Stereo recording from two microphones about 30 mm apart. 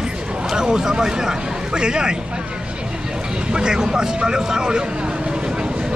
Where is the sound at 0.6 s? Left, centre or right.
Right.